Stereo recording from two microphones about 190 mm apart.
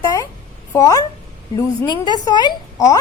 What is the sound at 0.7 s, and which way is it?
A woman's voice, 15° left (ahead or behind).